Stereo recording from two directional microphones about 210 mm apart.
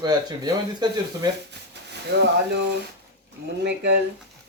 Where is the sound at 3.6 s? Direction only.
55° right (ahead or behind).